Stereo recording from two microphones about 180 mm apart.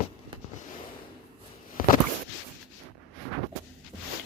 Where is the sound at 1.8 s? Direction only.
50° left (ahead or behind).